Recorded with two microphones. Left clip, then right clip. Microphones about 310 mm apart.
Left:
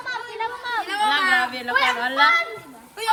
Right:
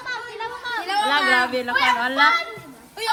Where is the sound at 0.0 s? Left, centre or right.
Left.